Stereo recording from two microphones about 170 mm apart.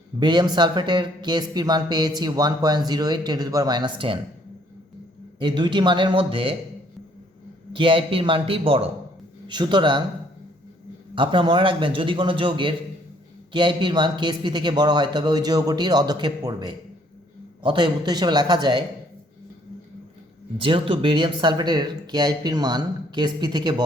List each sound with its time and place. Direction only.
0.2 s speech: 25° right (ahead or behind)
5.4 s speech: 25° right (ahead or behind)
7.7 s a man's voice: 30° right (ahead or behind)
11.1 s speech: 30° right (ahead or behind)
20.6 s speech: 30° right (ahead or behind)